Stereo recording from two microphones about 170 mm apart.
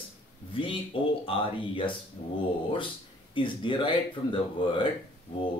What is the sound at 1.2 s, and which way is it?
Speech, 30° left (ahead or behind).